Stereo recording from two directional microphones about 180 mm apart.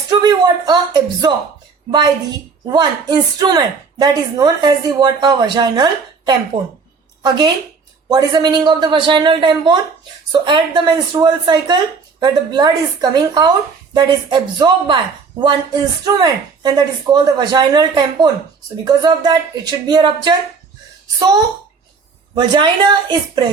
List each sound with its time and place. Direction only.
0.1 s a woman's voice: 20° right (ahead or behind)
22.4 s a woman's voice: 25° right (ahead or behind)